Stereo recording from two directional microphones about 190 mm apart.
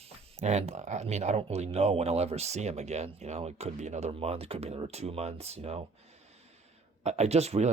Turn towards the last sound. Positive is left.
turn(degrees=-35)  # may be behind; listen again after turning